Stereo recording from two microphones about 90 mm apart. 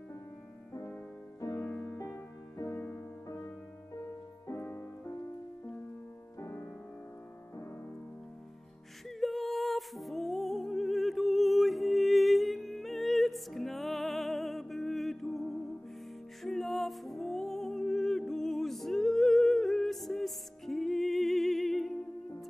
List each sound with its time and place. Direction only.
1.6 s music: 20° left (ahead or behind)
2.0 s music: 30° left (ahead or behind)
2.7 s music: 20° left (ahead or behind)
4.6 s music: 25° left (ahead or behind)
6.4 s music: 25° left (ahead or behind)
9.2 s music: centre (ahead or behind)